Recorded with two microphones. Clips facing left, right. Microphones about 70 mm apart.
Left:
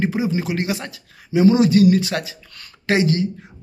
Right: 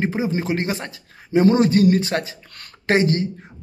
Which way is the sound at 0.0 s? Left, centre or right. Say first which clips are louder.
Left 1 dB; right.